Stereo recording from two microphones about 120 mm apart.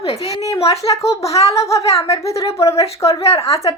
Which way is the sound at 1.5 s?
25° left (ahead or behind).